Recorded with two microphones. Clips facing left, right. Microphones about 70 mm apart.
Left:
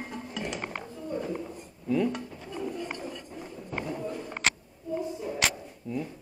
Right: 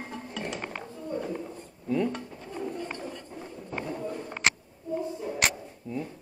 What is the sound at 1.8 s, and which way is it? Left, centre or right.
Dishes, right.